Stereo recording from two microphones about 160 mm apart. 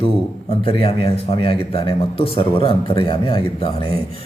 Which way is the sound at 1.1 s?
40° left (ahead or behind).